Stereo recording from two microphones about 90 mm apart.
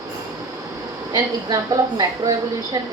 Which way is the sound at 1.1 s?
50° right (ahead or behind).